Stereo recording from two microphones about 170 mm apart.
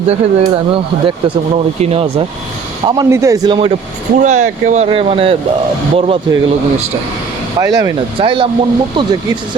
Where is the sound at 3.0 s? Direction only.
15° right (ahead or behind).